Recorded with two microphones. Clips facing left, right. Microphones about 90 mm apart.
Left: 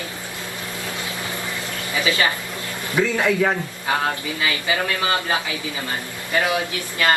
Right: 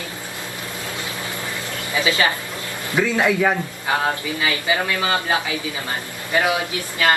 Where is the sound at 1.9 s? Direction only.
20° right (ahead or behind).